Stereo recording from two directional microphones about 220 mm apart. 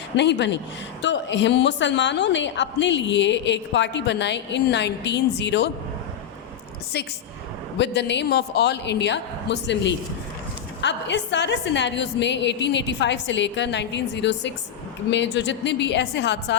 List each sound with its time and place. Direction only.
0.2 s a woman's voice: 50° left (ahead or behind)
6.9 s a woman's voice: 50° left (ahead or behind)